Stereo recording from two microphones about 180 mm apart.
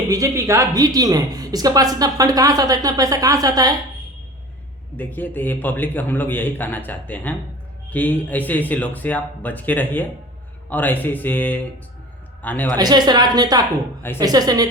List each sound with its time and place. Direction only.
0.1 s speech: 15° right (ahead or behind)
4.9 s a man's voice: 10° left (ahead or behind)
12.7 s speech: 20° right (ahead or behind)